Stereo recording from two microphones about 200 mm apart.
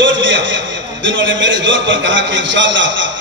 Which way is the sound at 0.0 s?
70° right (ahead or behind).